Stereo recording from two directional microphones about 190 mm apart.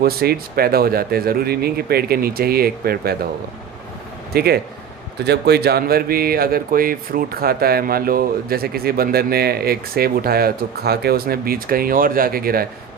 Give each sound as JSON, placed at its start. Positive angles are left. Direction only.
{"t": 0.0, "sound": "speech", "side_deg": -55}
{"t": 4.4, "sound": "speech", "side_deg": -55}